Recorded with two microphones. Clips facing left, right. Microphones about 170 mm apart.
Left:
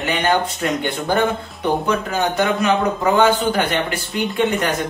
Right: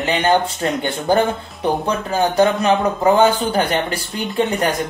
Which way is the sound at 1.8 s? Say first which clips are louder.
Right 1 dB; 30° right (ahead or behind).